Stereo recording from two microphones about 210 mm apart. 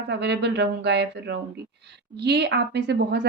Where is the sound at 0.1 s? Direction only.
55° right (ahead or behind).